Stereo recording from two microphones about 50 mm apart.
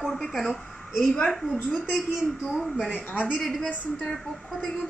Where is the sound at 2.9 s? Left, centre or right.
Left.